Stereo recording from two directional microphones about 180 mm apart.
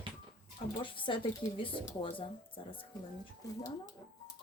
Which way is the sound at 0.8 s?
30° left (ahead or behind).